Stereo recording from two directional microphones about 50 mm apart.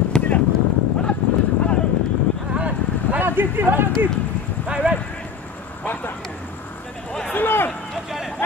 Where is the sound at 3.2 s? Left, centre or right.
Right.